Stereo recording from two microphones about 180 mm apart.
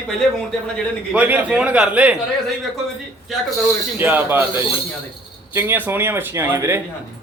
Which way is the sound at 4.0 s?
10° right (ahead or behind).